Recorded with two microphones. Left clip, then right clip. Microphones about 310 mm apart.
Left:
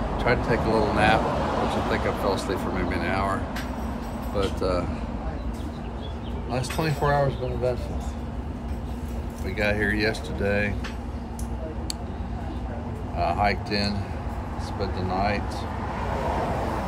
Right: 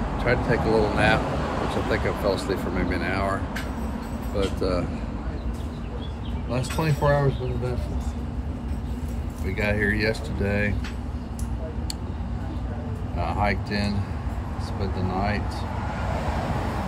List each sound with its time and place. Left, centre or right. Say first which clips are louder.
0.2 s speech: even; centre
4.6 s speech: left 1 dB; centre
6.5 s speech: even; centre
9.6 s speech: even; centre
13.2 s speech: left 2 dB; centre